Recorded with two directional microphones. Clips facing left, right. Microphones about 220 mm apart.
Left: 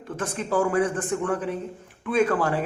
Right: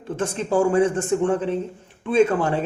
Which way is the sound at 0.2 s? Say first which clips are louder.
Right 4 dB; 25° right (ahead or behind).